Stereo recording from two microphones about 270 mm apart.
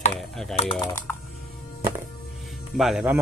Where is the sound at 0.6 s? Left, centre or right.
Centre.